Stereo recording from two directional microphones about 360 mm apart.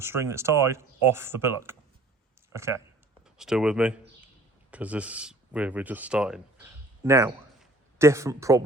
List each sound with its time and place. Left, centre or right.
0.0 s speech: centre